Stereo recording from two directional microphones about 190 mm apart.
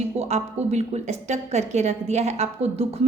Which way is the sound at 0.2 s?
35° right (ahead or behind).